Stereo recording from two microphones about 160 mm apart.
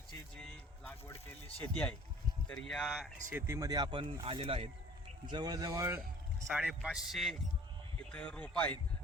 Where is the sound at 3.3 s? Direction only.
15° right (ahead or behind); by 4.7 s 35° right (ahead or behind).